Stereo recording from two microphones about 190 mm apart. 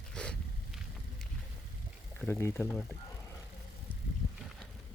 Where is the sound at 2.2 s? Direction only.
10° left (ahead or behind).